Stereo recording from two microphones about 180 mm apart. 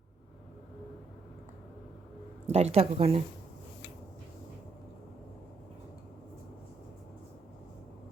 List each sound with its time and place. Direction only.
2.5 s a woman's voice: 35° right (ahead or behind)